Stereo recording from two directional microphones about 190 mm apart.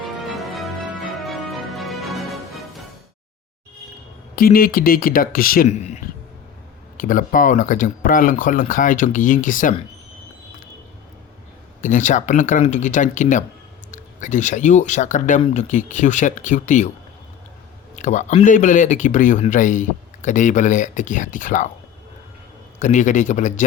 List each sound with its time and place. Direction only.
0.3 s music: centre (ahead or behind)
4.4 s speech: 50° left (ahead or behind)
11.8 s speech: 40° left (ahead or behind)
17.9 s speech: 40° left (ahead or behind)
22.8 s speech: 40° left (ahead or behind)